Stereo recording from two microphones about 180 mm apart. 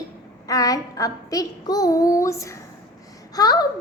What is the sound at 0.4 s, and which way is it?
A child's voice, 20° left (ahead or behind).